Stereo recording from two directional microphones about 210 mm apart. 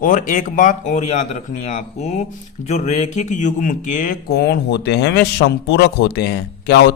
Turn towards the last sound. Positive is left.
turn(degrees=50)  # may be behind; listen again after turning